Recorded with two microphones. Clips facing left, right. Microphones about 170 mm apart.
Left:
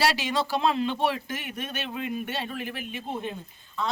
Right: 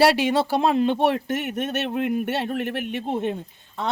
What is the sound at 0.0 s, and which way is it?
Speech, 60° right (ahead or behind).